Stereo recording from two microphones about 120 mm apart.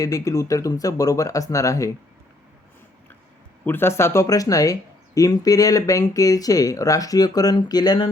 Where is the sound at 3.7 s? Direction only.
20° left (ahead or behind).